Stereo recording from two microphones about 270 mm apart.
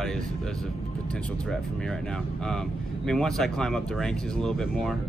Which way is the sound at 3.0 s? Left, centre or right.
Centre.